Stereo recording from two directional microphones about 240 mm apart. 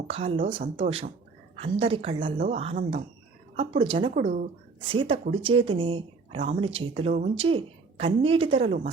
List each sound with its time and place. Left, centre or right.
0.1 s speech: right